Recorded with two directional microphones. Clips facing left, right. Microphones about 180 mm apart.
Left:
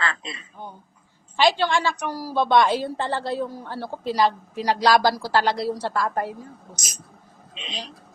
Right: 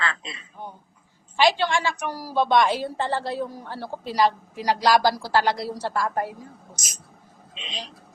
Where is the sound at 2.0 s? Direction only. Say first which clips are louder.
Even; 15° right (ahead or behind).